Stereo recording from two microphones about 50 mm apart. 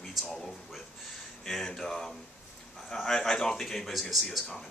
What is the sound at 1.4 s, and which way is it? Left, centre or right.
Speech, centre.